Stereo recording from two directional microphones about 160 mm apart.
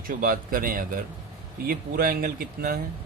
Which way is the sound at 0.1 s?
60° right (ahead or behind).